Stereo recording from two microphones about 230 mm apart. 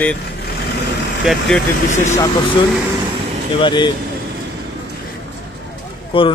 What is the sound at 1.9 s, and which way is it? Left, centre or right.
Speech, left.